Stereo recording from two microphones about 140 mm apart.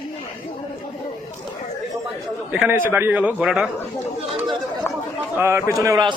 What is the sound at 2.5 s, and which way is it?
A man's voice, 10° right (ahead or behind).